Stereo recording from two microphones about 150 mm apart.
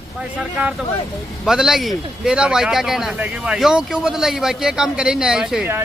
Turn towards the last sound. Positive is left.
turn(degrees=-10)  # may be behind; listen again after turning